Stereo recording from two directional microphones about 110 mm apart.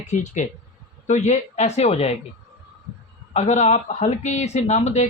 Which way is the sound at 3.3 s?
90° left.